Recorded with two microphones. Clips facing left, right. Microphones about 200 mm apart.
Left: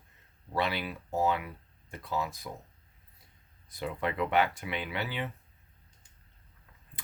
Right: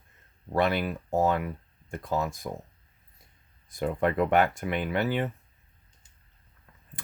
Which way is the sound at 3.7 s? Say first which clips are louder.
Right 7 dB; 50° right (ahead or behind).